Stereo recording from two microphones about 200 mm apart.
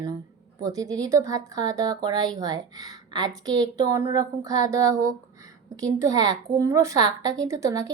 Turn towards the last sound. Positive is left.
turn(degrees=-15)  # may be behind; listen again after turning